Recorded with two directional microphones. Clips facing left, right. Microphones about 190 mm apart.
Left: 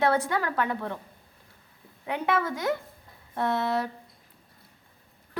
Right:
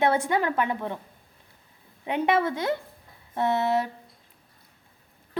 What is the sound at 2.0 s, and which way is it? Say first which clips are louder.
A woman's voice: right 4 dB; 25° right (ahead or behind).